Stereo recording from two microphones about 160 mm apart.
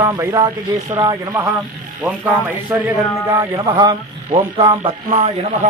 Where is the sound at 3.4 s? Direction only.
30° right (ahead or behind).